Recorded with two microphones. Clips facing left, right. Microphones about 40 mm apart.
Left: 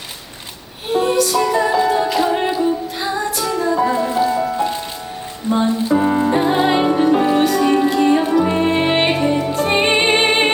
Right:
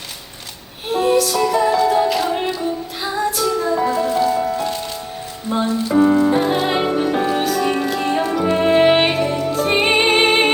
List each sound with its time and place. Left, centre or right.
0.9 s music: centre
1.7 s music: centre
3.9 s music: centre
6.0 s music: left
6.2 s music: centre
9.1 s music: centre